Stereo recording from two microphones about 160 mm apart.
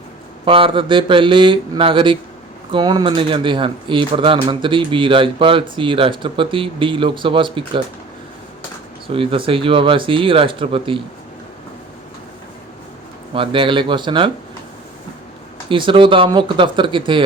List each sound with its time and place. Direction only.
0.4 s speech: 35° right (ahead or behind)
9.1 s speech: 35° right (ahead or behind)
13.3 s speech: 35° right (ahead or behind)
15.7 s speech: 30° right (ahead or behind)